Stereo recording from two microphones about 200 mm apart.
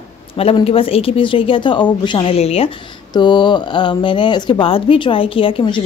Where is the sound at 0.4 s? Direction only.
30° left (ahead or behind).